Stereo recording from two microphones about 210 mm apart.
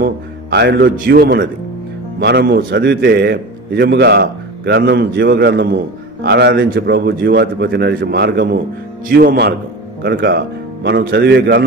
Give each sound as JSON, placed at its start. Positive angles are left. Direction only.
{"t": 0.0, "sound": "a man's voice", "side_deg": -50}